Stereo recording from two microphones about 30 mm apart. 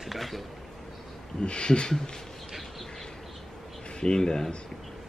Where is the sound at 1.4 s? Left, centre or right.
Left.